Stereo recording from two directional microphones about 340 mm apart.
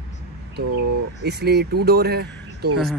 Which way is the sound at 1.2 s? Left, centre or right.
Right.